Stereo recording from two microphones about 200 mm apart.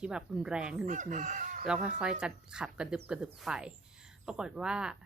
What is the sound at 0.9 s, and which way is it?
Speech, 40° right (ahead or behind).